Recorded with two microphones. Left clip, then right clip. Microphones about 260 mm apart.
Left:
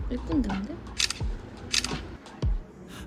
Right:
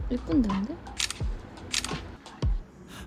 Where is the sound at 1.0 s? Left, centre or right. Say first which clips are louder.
Left 4 dB; centre.